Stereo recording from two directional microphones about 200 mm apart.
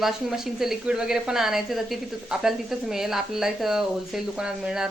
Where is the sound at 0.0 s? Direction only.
Centre (ahead or behind).